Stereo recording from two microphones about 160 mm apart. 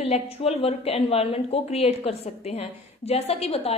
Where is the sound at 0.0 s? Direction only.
40° left (ahead or behind).